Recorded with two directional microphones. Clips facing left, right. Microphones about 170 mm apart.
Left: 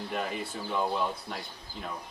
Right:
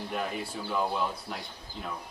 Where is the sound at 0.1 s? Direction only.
Centre (ahead or behind).